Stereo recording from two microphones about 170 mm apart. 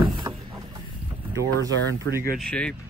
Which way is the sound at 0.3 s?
20° right (ahead or behind).